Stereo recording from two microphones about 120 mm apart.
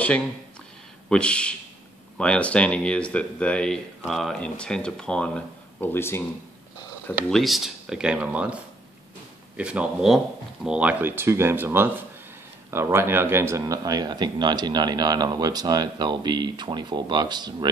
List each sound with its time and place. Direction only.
1.0 s speech: 10° left (ahead or behind)
7.2 s speech: centre (ahead or behind)
9.6 s speech: 10° right (ahead or behind); by 17.6 s 35° right (ahead or behind)